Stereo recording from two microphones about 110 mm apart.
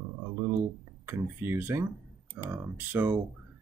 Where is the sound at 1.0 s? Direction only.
20° right (ahead or behind).